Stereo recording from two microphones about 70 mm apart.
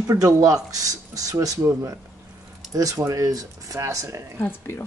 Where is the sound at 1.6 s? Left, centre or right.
Right.